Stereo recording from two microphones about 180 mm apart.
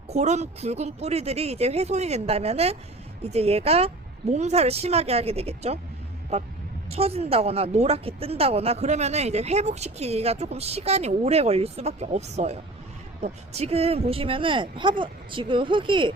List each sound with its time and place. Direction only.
0.1 s speech: 40° right (ahead or behind)